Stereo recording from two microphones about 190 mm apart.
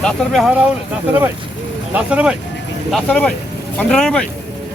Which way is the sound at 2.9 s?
5° left (ahead or behind).